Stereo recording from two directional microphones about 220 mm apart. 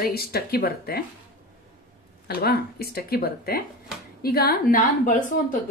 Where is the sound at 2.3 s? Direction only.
45° left (ahead or behind).